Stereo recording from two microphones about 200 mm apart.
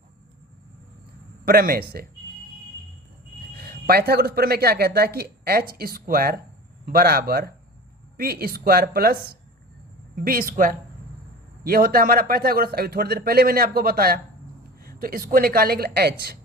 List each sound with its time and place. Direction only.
1.5 s speech: 50° right (ahead or behind)
3.6 s speech: 50° right (ahead or behind)